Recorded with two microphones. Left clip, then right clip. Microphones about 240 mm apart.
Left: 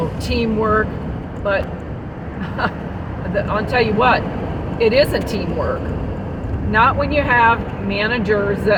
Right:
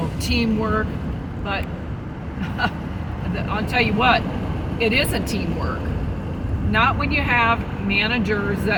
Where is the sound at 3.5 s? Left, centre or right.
Right.